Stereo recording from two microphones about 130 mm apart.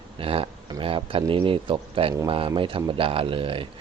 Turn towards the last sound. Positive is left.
turn(degrees=-45)  # may be behind; listen again after turning